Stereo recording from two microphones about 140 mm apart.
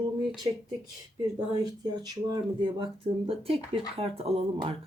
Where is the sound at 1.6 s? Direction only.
30° right (ahead or behind).